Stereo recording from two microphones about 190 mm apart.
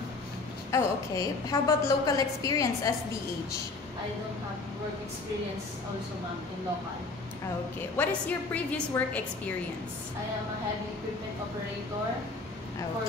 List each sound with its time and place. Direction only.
0.7 s a woman's voice: 15° left (ahead or behind)
8.0 s a woman's voice: 10° left (ahead or behind)